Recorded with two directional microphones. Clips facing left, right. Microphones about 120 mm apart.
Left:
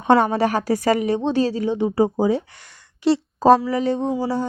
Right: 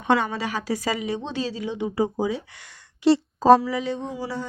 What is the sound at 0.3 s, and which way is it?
Speech, 50° left (ahead or behind).